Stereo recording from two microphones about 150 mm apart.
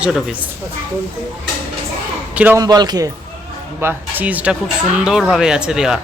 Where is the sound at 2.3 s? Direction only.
10° right (ahead or behind).